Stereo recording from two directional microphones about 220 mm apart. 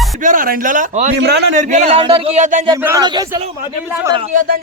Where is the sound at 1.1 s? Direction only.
50° right (ahead or behind).